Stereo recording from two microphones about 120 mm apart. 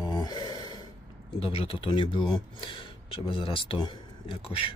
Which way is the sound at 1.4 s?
50° left (ahead or behind).